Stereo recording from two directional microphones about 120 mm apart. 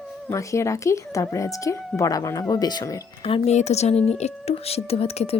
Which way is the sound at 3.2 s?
55° left (ahead or behind).